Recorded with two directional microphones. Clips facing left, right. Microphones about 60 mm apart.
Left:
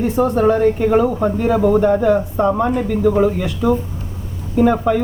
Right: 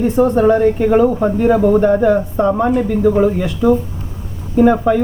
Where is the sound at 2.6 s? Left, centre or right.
Right.